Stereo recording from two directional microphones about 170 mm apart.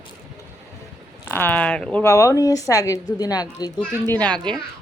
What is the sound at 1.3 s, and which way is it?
A woman's voice, 10° left (ahead or behind).